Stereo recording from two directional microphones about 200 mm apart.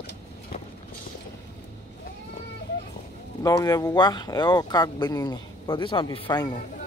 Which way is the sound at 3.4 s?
15° left (ahead or behind).